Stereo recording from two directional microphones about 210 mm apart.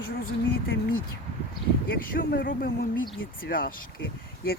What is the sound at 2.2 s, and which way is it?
Speech, 45° left (ahead or behind).